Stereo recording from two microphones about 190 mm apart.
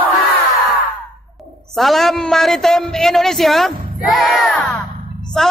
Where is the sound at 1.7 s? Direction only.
Centre (ahead or behind).